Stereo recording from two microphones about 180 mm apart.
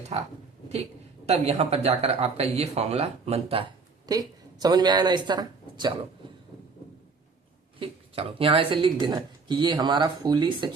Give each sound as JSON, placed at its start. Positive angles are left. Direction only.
{"t": 1.3, "sound": "speech", "side_deg": -35}
{"t": 7.8, "sound": "speech", "side_deg": -30}